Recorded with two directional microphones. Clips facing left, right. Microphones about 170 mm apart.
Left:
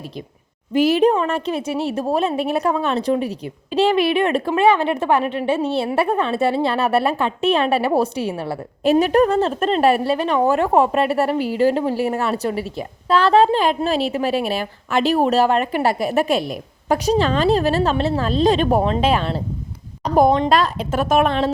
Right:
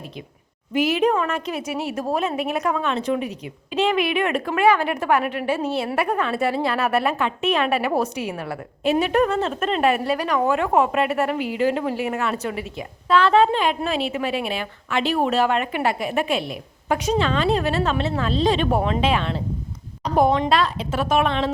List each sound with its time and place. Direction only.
0.7 s a woman's voice: 35° left (ahead or behind)